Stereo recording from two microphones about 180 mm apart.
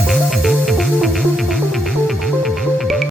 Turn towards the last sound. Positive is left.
turn(degrees=0)  # may be behind; listen again after turning